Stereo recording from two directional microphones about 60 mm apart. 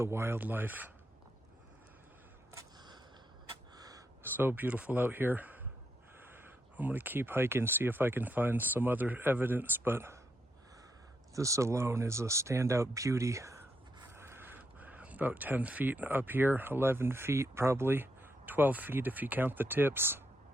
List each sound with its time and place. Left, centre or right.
0.0 s speech: right
0.3 s speech: right
3.8 s a sound: right
4.4 s speech: right
11.3 s speech: right
14.1 s speech: right